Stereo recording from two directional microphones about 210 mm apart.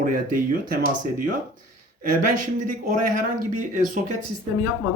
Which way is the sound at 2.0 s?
40° right (ahead or behind).